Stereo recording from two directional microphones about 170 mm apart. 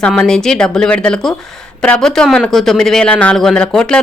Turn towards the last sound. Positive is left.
turn(degrees=5)  # may be behind; listen again after turning